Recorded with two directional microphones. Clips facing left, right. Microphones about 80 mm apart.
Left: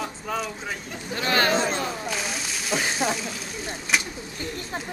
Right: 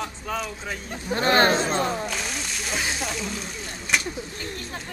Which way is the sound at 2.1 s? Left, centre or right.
Centre.